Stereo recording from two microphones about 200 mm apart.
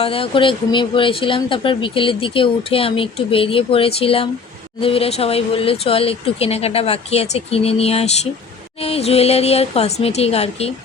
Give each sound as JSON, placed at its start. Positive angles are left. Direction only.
{"t": 0.0, "sound": "speech", "side_deg": 30}